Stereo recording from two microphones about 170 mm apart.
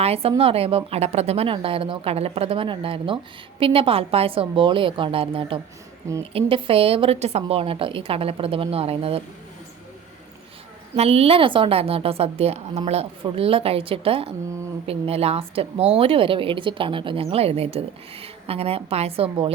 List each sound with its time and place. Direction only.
0.0 s a woman's voice: 35° right (ahead or behind)
10.9 s a woman's voice: 35° right (ahead or behind)